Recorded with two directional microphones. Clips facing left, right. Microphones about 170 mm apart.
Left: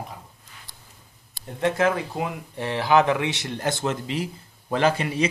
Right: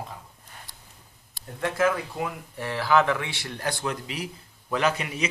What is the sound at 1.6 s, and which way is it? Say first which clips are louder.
Speech: left 3 dB; 20° left (ahead or behind).